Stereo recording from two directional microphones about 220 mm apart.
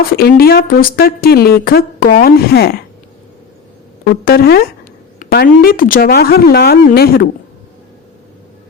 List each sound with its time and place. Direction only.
0.1 s a woman's voice: 45° left (ahead or behind)
4.0 s a woman's voice: 40° left (ahead or behind)